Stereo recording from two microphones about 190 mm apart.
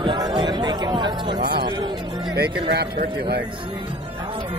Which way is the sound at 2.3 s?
55° right (ahead or behind).